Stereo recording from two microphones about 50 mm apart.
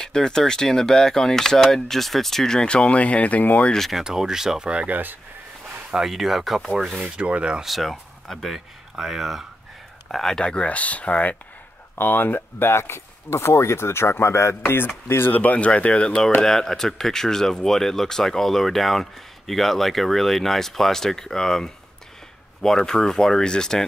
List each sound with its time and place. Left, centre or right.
0.0 s speech: centre; by 3.7 s left
3.9 s speech: centre
4.6 s rub: right
5.9 s speech: centre
6.9 s rub: right
7.6 s speech: centre
8.5 s speech: centre
10.1 s speech: centre
10.4 s speech: left
12.0 s speech: left
14.6 s speech: left
15.5 s speech: left
16.4 s speech: centre